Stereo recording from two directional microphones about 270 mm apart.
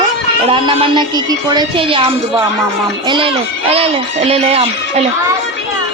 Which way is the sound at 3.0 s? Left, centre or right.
Centre.